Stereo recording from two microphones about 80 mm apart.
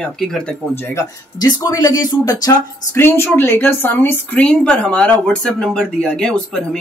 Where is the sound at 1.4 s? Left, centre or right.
Left.